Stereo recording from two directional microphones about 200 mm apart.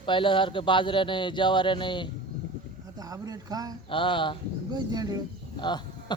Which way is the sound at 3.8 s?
25° left (ahead or behind).